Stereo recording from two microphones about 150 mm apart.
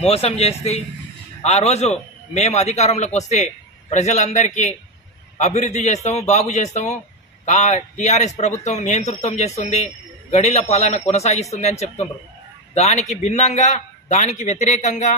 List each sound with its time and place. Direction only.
0.0 s a man's voice: 45° left (ahead or behind)